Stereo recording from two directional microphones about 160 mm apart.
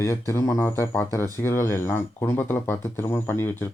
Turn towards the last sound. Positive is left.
turn(degrees=15)  # may be behind; listen again after turning